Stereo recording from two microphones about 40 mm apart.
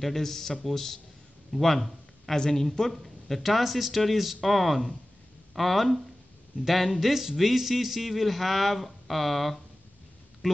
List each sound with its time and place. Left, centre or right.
0.0 s speech: centre
2.9 s a man's voice: centre